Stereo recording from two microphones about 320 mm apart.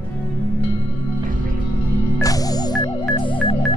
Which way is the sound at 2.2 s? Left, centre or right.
Centre.